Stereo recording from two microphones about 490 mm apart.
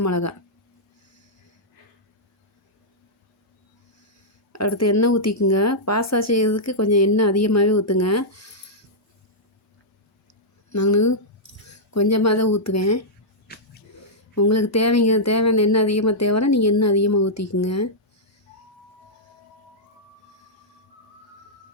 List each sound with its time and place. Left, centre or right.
0.0 s speech: left
4.5 s speech: left
10.7 s speech: left
13.5 s wheeze: centre
14.2 s speech: left